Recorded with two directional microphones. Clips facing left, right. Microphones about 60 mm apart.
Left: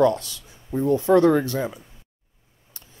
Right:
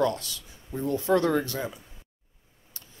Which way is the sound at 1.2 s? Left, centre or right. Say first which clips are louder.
Left 7 dB; left.